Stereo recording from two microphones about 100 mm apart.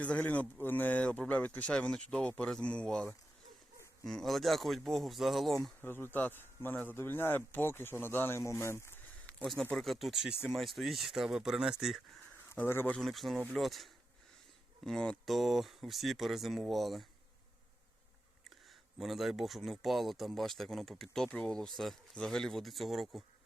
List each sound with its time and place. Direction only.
0.0 s speech: 15° left (ahead or behind)
5.8 s speech: 20° left (ahead or behind)
9.2 s speech: 5° left (ahead or behind)
12.5 s speech: 25° left (ahead or behind)
12.9 s speech: centre (ahead or behind)
18.9 s speech: centre (ahead or behind)